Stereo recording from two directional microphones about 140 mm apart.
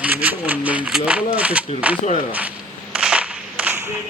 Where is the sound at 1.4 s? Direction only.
10° right (ahead or behind).